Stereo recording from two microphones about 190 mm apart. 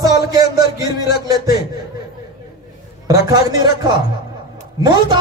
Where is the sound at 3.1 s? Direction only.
20° right (ahead or behind).